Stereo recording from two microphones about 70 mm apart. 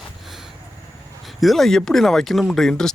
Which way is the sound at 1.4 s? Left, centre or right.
Centre.